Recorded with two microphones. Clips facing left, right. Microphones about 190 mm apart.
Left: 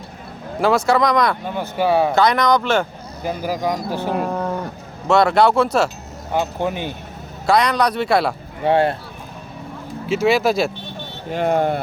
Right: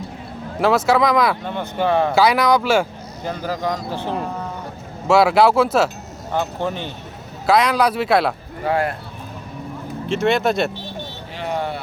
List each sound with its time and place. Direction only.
0.9 s a man's voice: 5° right (ahead or behind)
1.5 s speech: 10° left (ahead or behind)
2.1 s speech: 5° right (ahead or behind)
3.2 s speech: 10° left (ahead or behind)
4.0 s speech: 60° left (ahead or behind)
5.0 s a man's voice: 5° right (ahead or behind)
6.3 s speech: 15° left (ahead or behind)
7.4 s a man's voice: 5° right (ahead or behind)
8.6 s speech: 25° left (ahead or behind)
10.1 s a man's voice: centre (ahead or behind)
11.3 s speech: 50° left (ahead or behind)